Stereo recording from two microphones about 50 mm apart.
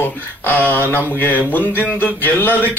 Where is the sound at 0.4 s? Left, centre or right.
Left.